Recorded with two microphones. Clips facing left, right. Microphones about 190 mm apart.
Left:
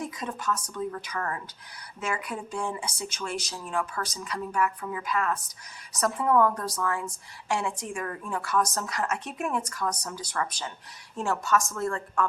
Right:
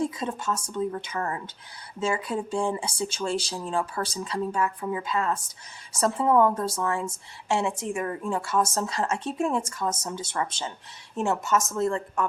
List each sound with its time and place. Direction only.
0.0 s a woman's voice: 30° right (ahead or behind)